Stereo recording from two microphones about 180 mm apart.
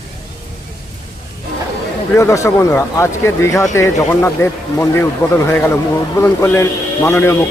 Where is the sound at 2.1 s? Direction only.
15° left (ahead or behind).